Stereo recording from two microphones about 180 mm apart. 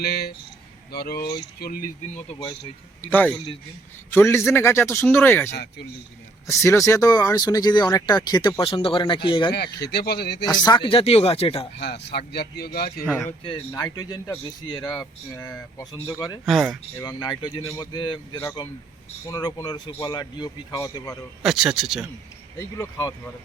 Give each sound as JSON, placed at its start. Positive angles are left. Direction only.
{"t": 0.0, "sound": "speech", "side_deg": 60}
{"t": 3.0, "sound": "speech", "side_deg": 10}
{"t": 9.7, "sound": "speech", "side_deg": 65}
{"t": 10.4, "sound": "a man's voice", "side_deg": 25}
{"t": 11.8, "sound": "speech", "side_deg": 65}
{"t": 13.4, "sound": "speech", "side_deg": 30}
{"t": 16.5, "sound": "a man's voice", "side_deg": 0}
{"t": 17.0, "sound": "speech", "side_deg": 25}
{"t": 21.4, "sound": "a man's voice", "side_deg": -5}
{"t": 22.5, "sound": "speech", "side_deg": 15}